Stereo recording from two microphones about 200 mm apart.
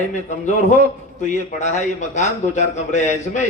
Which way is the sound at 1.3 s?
35° left (ahead or behind).